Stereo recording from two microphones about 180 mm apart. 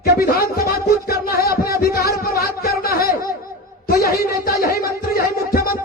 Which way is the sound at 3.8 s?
55° left (ahead or behind).